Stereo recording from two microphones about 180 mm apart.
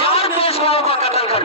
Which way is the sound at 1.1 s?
35° left (ahead or behind).